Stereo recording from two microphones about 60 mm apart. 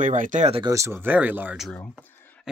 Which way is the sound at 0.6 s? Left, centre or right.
Right.